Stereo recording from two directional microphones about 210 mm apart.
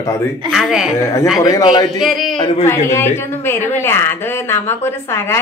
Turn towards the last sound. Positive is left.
turn(degrees=10)  # may be behind; listen again after turning